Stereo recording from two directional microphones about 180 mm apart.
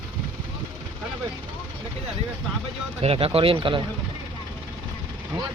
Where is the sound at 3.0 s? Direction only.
30° right (ahead or behind).